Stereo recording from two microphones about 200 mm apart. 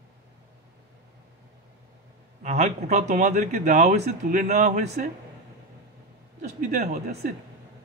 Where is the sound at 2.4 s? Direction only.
35° right (ahead or behind).